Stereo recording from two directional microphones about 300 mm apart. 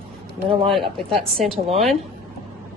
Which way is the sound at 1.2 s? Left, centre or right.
Centre.